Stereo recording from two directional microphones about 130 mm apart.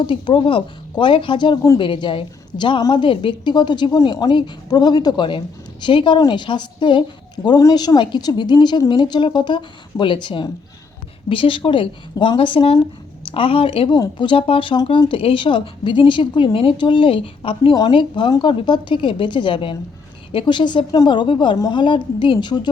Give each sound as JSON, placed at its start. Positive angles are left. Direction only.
{"t": 0.0, "sound": "a woman's voice", "side_deg": 40}